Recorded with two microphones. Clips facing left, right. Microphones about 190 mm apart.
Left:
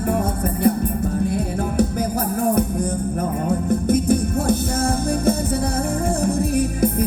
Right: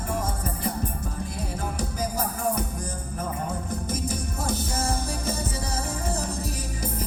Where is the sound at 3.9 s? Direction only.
60° left (ahead or behind).